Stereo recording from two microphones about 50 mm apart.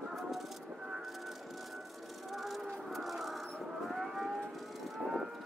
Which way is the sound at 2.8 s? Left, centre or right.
Centre.